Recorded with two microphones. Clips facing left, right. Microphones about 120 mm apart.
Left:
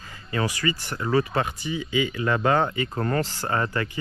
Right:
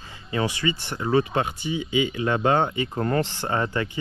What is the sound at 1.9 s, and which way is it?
Speech, 20° right (ahead or behind).